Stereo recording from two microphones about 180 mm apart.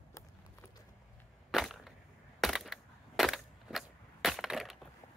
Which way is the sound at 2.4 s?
Centre (ahead or behind).